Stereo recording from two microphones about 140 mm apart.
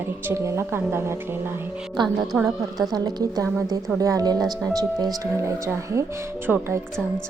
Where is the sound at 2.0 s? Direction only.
35° right (ahead or behind).